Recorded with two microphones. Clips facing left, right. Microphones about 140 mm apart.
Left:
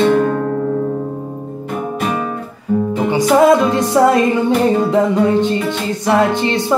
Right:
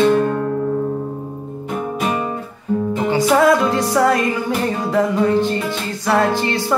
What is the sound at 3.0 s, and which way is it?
Music, 15° left (ahead or behind).